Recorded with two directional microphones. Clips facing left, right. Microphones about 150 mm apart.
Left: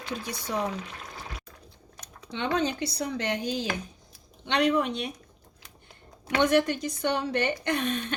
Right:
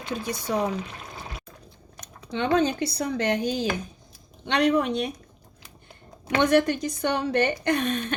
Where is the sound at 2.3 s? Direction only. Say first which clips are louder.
Right 5 dB; 45° right (ahead or behind).